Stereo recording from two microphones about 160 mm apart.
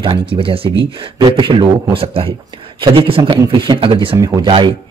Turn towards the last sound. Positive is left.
turn(degrees=-30)  # may be behind; listen again after turning